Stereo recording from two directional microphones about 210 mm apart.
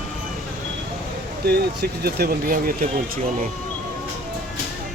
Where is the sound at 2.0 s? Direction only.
45° right (ahead or behind).